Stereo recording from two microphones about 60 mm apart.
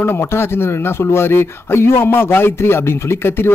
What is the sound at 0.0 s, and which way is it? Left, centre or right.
Speech, left.